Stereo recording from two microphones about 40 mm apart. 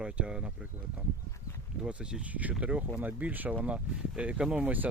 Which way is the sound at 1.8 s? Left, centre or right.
Right.